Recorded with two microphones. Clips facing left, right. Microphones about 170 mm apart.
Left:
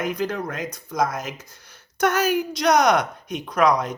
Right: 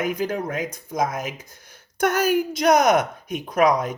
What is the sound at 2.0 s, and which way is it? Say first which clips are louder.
A woman's voice: right 1 dB; 50° right (ahead or behind).